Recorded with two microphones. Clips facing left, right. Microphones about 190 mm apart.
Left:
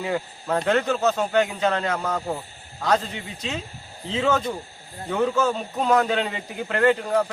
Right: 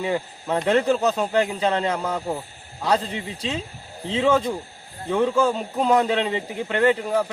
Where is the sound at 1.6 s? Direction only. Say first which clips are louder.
Right 1 dB; 30° right (ahead or behind).